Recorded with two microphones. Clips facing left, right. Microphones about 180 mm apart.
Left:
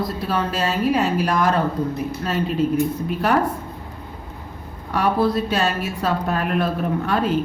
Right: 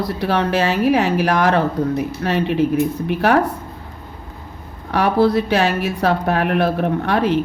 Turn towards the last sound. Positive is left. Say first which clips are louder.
# right 3 dB
turn(degrees=-70)  # may be behind; listen again after turning